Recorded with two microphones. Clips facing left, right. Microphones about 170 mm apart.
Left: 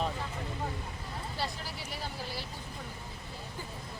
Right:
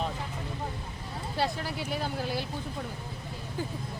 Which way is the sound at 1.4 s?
60° right (ahead or behind).